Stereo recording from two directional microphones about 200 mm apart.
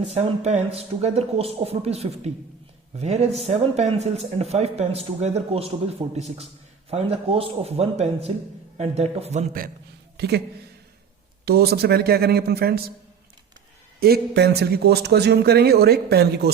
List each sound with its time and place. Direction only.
0.0 s speech: 35° right (ahead or behind)
10.2 s speech: 55° right (ahead or behind)
11.4 s a man's voice: 50° right (ahead or behind)
14.0 s a man's voice: 50° right (ahead or behind)